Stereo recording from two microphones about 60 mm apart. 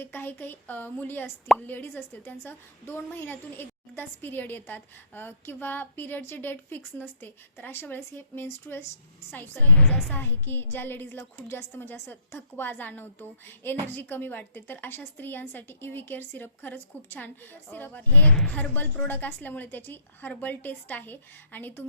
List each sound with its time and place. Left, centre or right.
0.0 s a woman's voice: left
2.2 s a woman's voice: left